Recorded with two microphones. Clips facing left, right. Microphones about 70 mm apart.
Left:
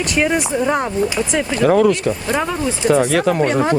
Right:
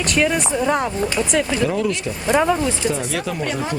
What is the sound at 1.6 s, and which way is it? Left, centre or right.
Speech, left.